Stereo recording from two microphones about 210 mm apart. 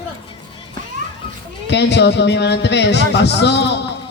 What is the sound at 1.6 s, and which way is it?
A man's voice, 55° left (ahead or behind).